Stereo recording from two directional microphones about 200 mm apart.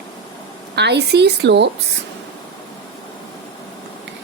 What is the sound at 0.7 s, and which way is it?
Speech, 55° right (ahead or behind).